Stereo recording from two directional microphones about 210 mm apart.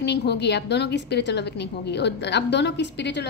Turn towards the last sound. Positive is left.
turn(degrees=55)  # may be behind; listen again after turning